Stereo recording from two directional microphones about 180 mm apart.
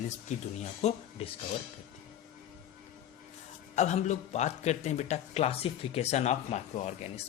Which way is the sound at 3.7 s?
40° left (ahead or behind).